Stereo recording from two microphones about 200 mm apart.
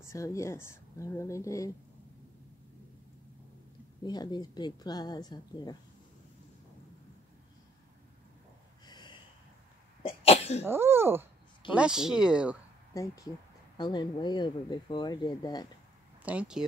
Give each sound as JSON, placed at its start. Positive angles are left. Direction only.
{"t": 0.0, "sound": "speech", "side_deg": 15}
{"t": 4.0, "sound": "speech", "side_deg": 20}
{"t": 8.8, "sound": "gasp", "side_deg": 20}
{"t": 10.0, "sound": "cough", "side_deg": 30}
{"t": 10.6, "sound": "speech", "side_deg": -10}
{"t": 12.9, "sound": "speech", "side_deg": 15}
{"t": 16.2, "sound": "speech", "side_deg": -5}